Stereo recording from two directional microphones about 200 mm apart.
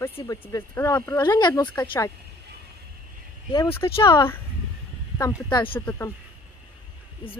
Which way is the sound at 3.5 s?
20° left (ahead or behind).